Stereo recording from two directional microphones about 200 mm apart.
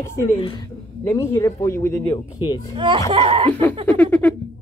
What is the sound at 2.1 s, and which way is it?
Speech, 20° left (ahead or behind).